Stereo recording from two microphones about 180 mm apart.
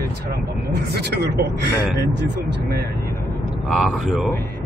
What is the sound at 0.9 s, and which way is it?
Speech, 65° right (ahead or behind).